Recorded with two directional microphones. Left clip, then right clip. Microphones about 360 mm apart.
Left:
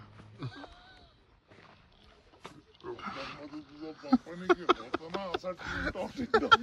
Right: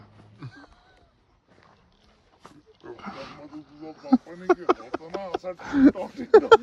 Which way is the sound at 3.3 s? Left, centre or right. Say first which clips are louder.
Right 1 dB; centre.